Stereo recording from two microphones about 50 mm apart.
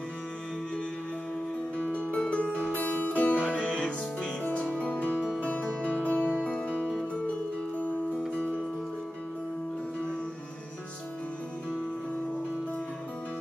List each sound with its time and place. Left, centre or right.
1.8 s music: left